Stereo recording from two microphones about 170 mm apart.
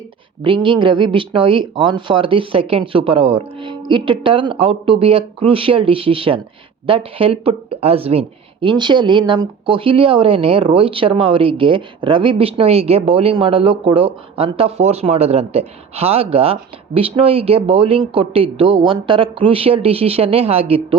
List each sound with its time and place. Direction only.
0.4 s speech: 30° right (ahead or behind)